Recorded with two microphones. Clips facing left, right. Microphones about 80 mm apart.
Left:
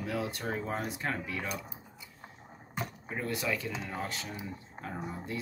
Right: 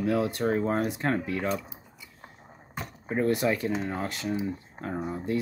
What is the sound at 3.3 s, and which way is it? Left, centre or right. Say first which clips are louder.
Speech: right 7 dB; right.